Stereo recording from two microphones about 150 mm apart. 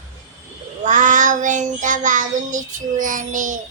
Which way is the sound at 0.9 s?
60° right (ahead or behind).